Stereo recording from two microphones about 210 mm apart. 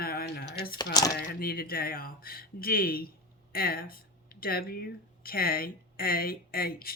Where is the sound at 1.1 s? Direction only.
45° left (ahead or behind).